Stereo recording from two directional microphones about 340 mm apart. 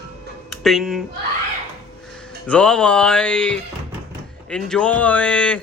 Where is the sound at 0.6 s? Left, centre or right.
Centre.